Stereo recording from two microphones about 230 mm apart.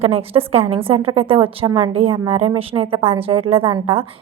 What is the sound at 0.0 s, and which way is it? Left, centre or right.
A woman's voice, right.